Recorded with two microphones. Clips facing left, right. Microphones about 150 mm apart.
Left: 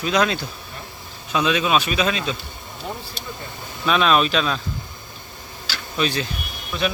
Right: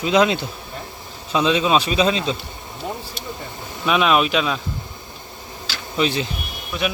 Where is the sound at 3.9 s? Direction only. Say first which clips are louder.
Right 1 dB; 15° right (ahead or behind).